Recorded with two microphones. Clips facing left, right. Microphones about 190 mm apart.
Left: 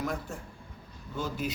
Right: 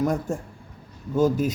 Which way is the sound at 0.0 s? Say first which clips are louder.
Right 10 dB; 45° right (ahead or behind).